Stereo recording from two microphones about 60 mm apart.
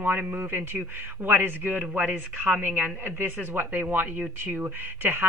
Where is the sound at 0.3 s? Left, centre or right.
Right.